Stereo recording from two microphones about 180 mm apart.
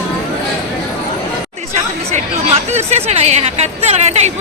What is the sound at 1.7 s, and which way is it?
Speech, 35° right (ahead or behind).